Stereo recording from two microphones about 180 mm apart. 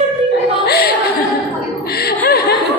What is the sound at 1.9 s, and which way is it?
Chuckle, 60° left (ahead or behind).